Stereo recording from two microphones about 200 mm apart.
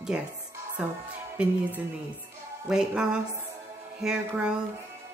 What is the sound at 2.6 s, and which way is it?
Speech, 5° right (ahead or behind).